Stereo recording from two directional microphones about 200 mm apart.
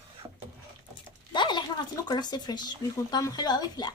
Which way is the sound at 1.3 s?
25° left (ahead or behind).